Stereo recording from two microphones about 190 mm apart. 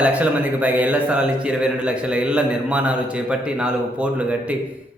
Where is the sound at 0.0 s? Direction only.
10° right (ahead or behind).